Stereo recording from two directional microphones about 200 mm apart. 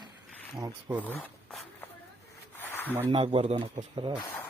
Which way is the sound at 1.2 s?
5° left (ahead or behind).